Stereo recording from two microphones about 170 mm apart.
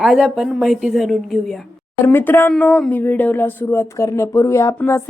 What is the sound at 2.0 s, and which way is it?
Speech, 10° left (ahead or behind).